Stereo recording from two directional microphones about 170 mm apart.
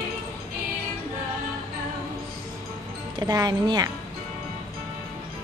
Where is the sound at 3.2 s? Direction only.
25° right (ahead or behind).